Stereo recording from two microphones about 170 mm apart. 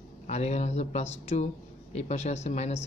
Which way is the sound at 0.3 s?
40° left (ahead or behind).